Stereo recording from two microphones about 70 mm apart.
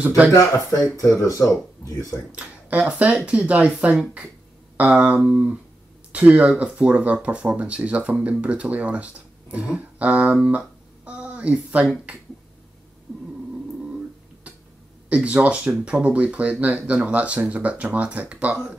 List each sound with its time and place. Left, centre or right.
0.3 s speech: left
2.7 s speech: centre
11.1 s a sound: centre
13.1 s cat: centre
15.0 s speech: centre